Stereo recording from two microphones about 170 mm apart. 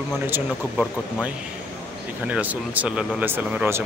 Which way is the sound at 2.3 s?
10° right (ahead or behind).